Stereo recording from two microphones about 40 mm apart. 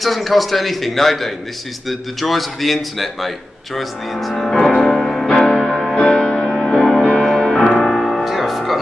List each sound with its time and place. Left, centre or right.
0.0 s a man's voice: centre
4.6 s music: centre
5.3 s music: centre
5.7 s music: centre
5.9 s music: left
6.7 s music: centre
7.0 s music: centre
7.8 s music: centre